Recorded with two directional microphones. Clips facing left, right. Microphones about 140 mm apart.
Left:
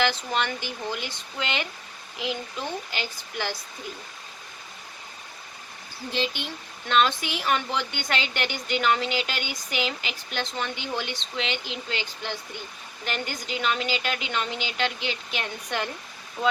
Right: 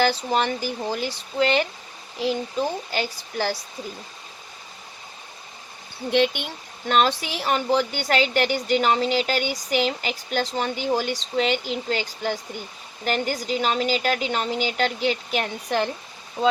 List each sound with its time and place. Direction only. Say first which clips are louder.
0.0 s speech: right 4 dB; 35° right (ahead or behind)
6.1 s speech: right 8 dB; 55° right (ahead or behind); by 15.9 s 35° right (ahead or behind)
16.4 s speech: right 4 dB; 25° right (ahead or behind)